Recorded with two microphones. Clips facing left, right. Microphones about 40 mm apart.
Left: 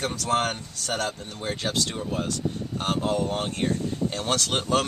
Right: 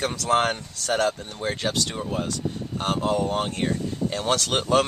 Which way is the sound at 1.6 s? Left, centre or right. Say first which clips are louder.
Left 1 dB; centre.